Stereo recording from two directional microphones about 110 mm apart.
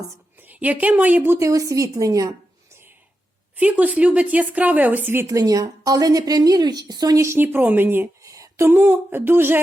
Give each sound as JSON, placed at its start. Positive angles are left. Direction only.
{"t": 0.4, "sound": "speech", "side_deg": -15}
{"t": 3.6, "sound": "speech", "side_deg": -15}
{"t": 5.2, "sound": "speech", "side_deg": -30}